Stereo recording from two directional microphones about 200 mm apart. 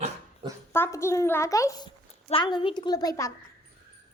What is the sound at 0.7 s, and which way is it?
A woman's voice, 10° left (ahead or behind).